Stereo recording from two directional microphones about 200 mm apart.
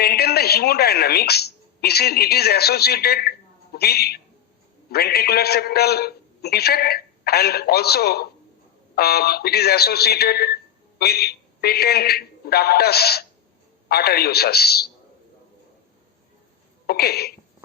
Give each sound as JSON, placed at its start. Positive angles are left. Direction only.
{"t": 0.0, "sound": "a woman's voice", "side_deg": 50}
{"t": 16.8, "sound": "speech", "side_deg": 50}